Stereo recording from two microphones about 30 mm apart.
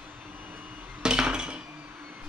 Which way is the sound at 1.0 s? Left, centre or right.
Right.